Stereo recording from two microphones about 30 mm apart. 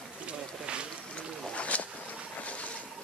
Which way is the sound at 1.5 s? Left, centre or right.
Left.